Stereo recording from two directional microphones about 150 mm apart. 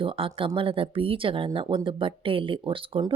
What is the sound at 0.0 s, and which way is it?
Speech, 35° right (ahead or behind).